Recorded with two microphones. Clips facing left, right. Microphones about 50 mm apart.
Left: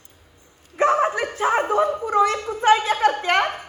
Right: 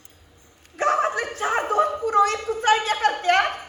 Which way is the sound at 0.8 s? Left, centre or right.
Left.